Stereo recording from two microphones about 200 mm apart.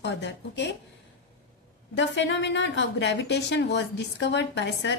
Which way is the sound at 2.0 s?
60° left (ahead or behind).